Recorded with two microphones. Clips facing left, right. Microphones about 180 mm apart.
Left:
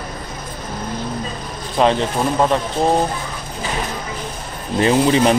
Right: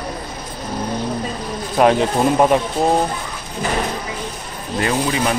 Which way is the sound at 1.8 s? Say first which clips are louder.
Right 2 dB; 10° right (ahead or behind).